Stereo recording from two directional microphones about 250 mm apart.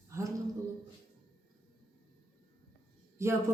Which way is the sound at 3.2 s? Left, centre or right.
Centre.